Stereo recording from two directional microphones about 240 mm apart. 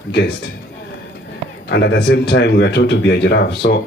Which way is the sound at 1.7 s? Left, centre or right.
Left.